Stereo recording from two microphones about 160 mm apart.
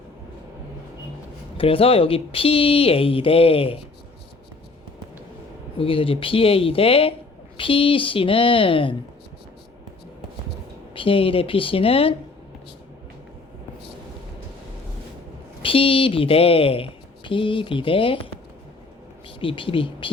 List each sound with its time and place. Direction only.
1.5 s a woman's voice: 35° left (ahead or behind)
5.7 s a woman's voice: 35° left (ahead or behind)
10.9 s a woman's voice: 35° left (ahead or behind)
15.6 s a woman's voice: 35° left (ahead or behind)
19.4 s a woman's voice: 35° left (ahead or behind)